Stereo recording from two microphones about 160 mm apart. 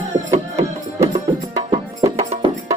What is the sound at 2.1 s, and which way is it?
Music, 40° right (ahead or behind).